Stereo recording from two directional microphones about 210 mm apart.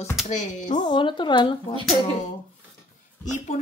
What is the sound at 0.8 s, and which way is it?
Speech, 20° left (ahead or behind).